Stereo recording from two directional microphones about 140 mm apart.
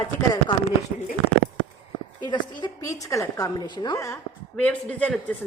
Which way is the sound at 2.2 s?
30° left (ahead or behind).